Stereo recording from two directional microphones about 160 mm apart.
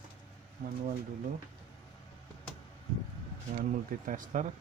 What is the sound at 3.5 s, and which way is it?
Speech, 55° right (ahead or behind).